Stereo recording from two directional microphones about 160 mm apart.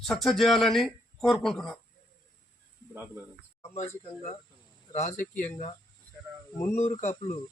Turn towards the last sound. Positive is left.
turn(degrees=45)  # may be behind; listen again after turning